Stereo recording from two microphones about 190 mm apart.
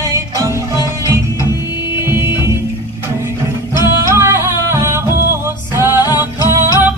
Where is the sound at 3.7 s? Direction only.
15° right (ahead or behind).